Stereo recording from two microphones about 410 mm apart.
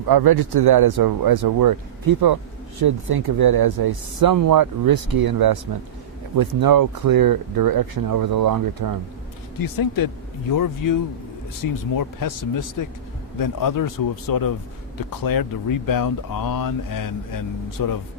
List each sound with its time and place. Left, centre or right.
0.1 s speech: right
9.6 s speech: left